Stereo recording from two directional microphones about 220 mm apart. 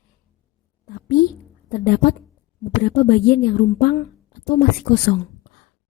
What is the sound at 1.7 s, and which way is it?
A woman's voice, 40° left (ahead or behind).